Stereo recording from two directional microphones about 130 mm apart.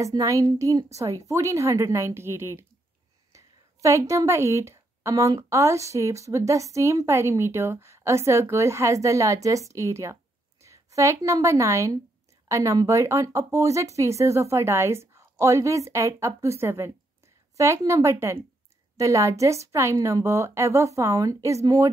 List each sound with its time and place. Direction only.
0.0 s a woman's voice: 25° right (ahead or behind)